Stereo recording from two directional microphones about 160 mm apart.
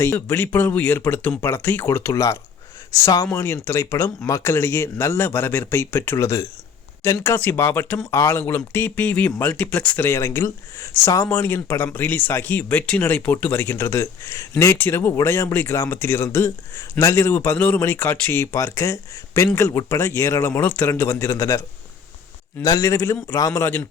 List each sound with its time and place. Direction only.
0.0 s speech: 15° left (ahead or behind)
22.6 s a man's voice: 20° left (ahead or behind)